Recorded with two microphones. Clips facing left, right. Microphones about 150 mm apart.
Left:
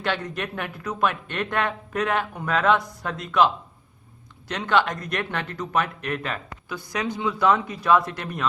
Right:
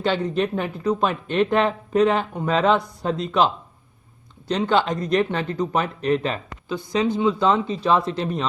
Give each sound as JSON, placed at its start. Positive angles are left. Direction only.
{"t": 0.0, "sound": "speech", "side_deg": -30}
{"t": 4.4, "sound": "speech", "side_deg": -30}